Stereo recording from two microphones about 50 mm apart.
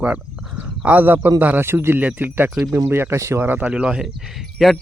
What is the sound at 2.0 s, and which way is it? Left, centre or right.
Speech, right.